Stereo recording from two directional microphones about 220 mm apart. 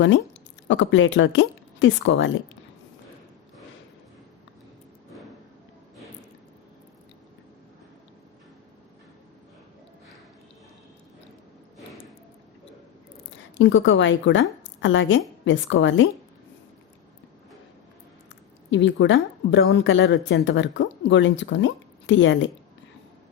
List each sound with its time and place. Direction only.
0.7 s a woman's voice: 60° left (ahead or behind)
13.3 s a woman's voice: 55° left (ahead or behind)
14.6 s a sound: 55° left (ahead or behind)
15.4 s a woman's voice: 55° left (ahead or behind)
18.7 s a woman's voice: 55° left (ahead or behind)